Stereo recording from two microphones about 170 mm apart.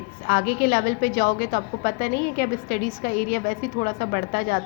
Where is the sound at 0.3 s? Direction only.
65° left (ahead or behind).